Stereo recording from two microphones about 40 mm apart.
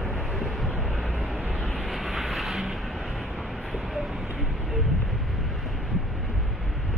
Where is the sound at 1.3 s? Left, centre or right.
Centre.